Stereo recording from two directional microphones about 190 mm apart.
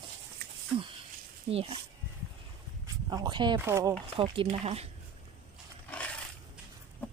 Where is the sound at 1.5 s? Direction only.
30° right (ahead or behind).